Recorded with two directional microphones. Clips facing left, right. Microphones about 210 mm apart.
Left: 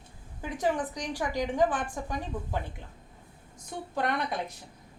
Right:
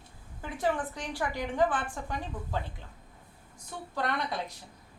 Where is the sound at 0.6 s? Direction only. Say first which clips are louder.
Left 1 dB; 15° left (ahead or behind).